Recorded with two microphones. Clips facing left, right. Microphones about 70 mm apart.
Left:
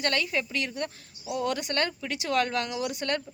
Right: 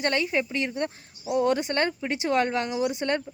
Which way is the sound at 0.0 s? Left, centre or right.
Right.